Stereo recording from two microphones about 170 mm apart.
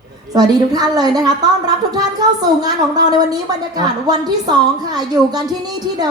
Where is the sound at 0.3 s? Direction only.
25° right (ahead or behind).